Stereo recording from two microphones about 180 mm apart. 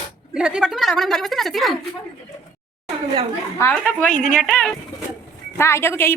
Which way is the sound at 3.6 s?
10° left (ahead or behind).